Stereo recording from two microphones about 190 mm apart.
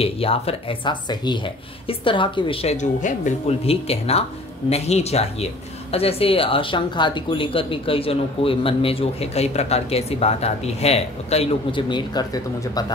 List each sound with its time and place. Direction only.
0.0 s speech: 30° left (ahead or behind)